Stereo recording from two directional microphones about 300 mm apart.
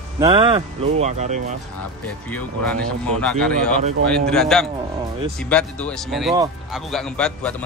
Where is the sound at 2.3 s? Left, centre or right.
Centre.